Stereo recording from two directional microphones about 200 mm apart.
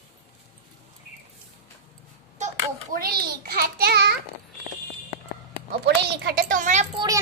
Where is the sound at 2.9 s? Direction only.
50° right (ahead or behind).